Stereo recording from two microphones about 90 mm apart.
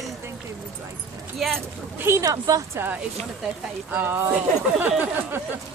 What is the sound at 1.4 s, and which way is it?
Speech, centre (ahead or behind).